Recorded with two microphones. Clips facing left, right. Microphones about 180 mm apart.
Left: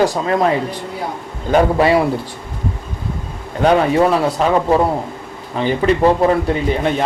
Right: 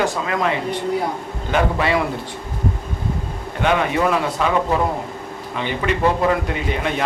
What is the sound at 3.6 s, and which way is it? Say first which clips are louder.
Speech: left 6 dB; 35° left (ahead or behind).